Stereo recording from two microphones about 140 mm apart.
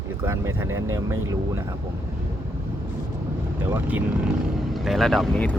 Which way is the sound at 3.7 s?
10° right (ahead or behind).